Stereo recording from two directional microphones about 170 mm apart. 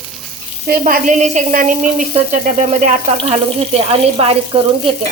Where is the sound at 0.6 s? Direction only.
55° right (ahead or behind).